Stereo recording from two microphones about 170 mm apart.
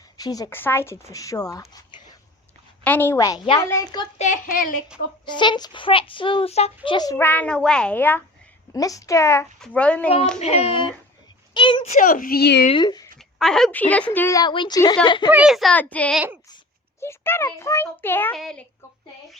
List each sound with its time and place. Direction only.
0.2 s a child's voice: 20° left (ahead or behind)
2.8 s a child's voice: 10° left (ahead or behind)
4.2 s a child's voice: 50° left (ahead or behind)
5.3 s a child's voice: 25° left (ahead or behind)
7.2 s a child's voice: 10° left (ahead or behind)
9.6 s a child's voice: 5° left (ahead or behind)
10.4 s speech: 35° left (ahead or behind)
11.9 s a child's voice: 50° left (ahead or behind); by 12.6 s 75° left (ahead or behind)
12.7 s a child's voice: 25° left (ahead or behind)
13.4 s a child's voice: 5° left (ahead or behind); by 15.3 s 25° left (ahead or behind)
15.3 s a child's voice: 5° right (ahead or behind)
16.1 s speech: 10° right (ahead or behind)
17.0 s a child's voice: 15° left (ahead or behind)
18.3 s a child's voice: centre (ahead or behind)